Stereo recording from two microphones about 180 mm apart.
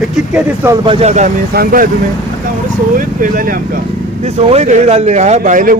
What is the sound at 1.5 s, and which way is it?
Speech, 50° right (ahead or behind).